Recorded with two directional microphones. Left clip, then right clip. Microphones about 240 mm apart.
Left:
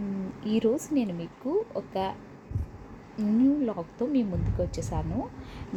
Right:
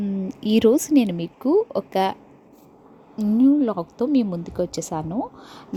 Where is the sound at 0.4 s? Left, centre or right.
Right.